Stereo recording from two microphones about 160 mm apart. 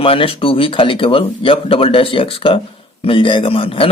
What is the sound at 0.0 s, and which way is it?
Speech, 35° left (ahead or behind).